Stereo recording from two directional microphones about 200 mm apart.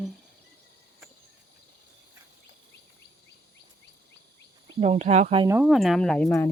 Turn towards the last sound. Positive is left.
turn(degrees=10)  # may be behind; listen again after turning